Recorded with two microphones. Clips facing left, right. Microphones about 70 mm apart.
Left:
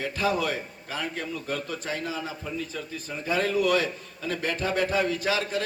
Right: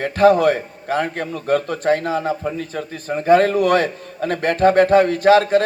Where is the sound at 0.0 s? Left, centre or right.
Right.